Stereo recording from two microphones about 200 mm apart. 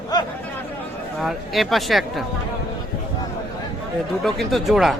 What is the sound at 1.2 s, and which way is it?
A man's voice, centre (ahead or behind).